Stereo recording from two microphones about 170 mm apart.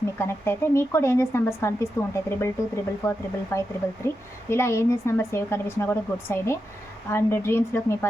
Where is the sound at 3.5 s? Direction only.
15° left (ahead or behind).